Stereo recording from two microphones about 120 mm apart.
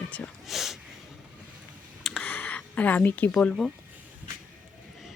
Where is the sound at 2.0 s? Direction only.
10° left (ahead or behind).